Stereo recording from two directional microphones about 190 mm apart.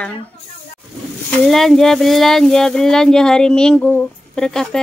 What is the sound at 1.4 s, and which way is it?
Speech, centre (ahead or behind).